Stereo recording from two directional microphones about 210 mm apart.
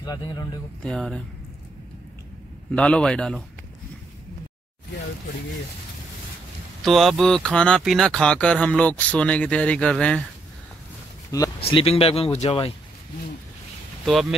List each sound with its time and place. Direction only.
0.0 s speech: 20° left (ahead or behind)
0.8 s speech: 5° left (ahead or behind)
2.7 s speech: 5° left (ahead or behind)
6.8 s speech: centre (ahead or behind)
11.6 s speech: 30° left (ahead or behind)